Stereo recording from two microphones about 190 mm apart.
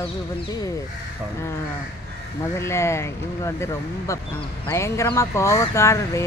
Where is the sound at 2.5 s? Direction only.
15° left (ahead or behind).